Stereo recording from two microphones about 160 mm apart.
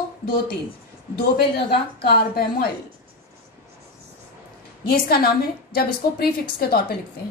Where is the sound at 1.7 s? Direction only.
80° left.